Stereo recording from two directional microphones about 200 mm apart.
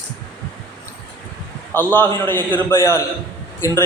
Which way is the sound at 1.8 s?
10° left (ahead or behind).